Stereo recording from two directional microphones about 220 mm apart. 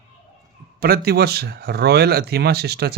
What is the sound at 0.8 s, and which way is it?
Speech, 40° right (ahead or behind).